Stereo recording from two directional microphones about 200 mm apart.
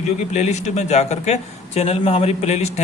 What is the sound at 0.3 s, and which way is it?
A man's voice, 35° left (ahead or behind).